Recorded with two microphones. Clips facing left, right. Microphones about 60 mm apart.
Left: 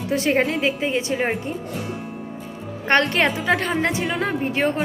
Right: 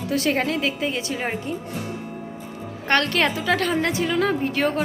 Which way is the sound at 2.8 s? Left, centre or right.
Left.